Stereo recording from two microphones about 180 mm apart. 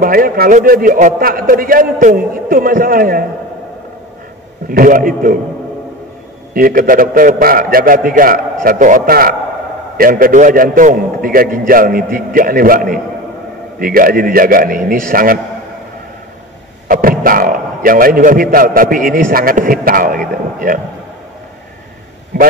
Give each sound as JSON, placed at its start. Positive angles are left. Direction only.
{"t": 0.0, "sound": "a man's voice", "side_deg": -55}
{"t": 4.6, "sound": "a man's voice", "side_deg": -50}
{"t": 6.5, "sound": "a man's voice", "side_deg": -50}
{"t": 16.8, "sound": "a man's voice", "side_deg": -50}